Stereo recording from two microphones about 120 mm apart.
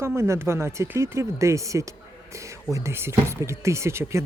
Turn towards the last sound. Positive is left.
turn(degrees=-25)  # may be behind; listen again after turning